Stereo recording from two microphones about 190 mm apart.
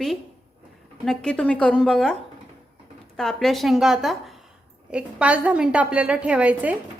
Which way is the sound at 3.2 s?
Centre (ahead or behind).